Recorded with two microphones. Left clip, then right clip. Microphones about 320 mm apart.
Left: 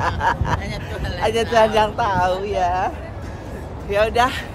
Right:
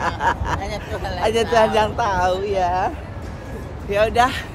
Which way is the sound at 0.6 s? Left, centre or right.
Centre.